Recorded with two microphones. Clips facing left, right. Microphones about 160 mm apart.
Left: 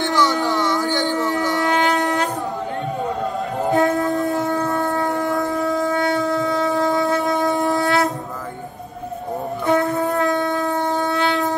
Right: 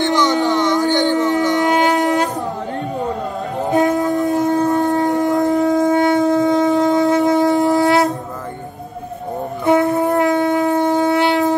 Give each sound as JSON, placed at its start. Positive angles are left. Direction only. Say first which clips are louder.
{"t": 0.1, "sound": "a sound", "louder": "right 3 dB", "side_deg": -20}
{"t": 0.9, "sound": "shofar", "louder": "right 5 dB", "side_deg": -20}
{"t": 3.7, "sound": "shofar", "louder": "right 3 dB", "side_deg": -20}
{"t": 9.7, "sound": "shofar", "louder": "right 5 dB", "side_deg": -20}